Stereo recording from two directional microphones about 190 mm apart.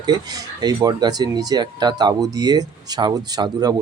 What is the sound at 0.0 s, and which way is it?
Speech, 20° right (ahead or behind).